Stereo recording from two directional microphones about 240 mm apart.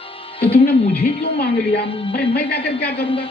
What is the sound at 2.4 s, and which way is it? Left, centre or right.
Speech, left.